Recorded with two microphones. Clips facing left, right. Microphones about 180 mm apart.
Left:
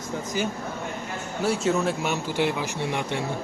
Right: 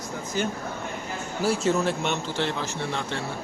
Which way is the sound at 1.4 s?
Centre (ahead or behind).